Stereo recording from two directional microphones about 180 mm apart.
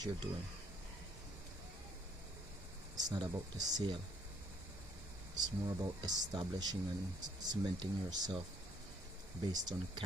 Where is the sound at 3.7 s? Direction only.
25° right (ahead or behind).